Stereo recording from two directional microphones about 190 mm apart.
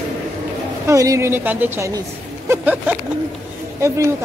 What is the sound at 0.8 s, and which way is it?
A woman's voice, 15° right (ahead or behind).